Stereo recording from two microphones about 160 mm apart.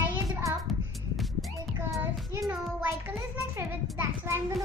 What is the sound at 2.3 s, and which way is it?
Child singing, 20° right (ahead or behind).